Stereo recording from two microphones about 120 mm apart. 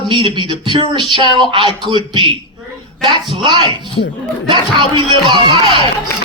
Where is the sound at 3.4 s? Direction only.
40° right (ahead or behind).